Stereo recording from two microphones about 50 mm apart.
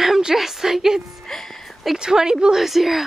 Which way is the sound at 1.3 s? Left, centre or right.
Centre.